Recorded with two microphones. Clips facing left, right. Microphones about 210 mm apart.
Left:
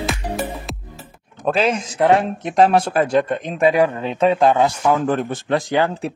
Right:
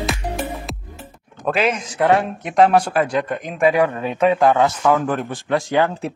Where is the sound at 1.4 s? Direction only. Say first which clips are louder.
Left 1 dB; 30° left (ahead or behind); by 5.0 s 15° left (ahead or behind).